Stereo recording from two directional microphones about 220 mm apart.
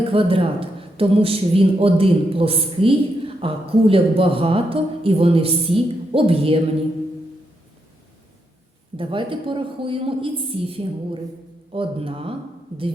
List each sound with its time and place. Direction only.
0.0 s speech: 25° right (ahead or behind)
9.0 s speech: 25° right (ahead or behind)